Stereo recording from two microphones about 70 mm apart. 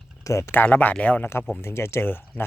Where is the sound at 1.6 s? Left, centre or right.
Left.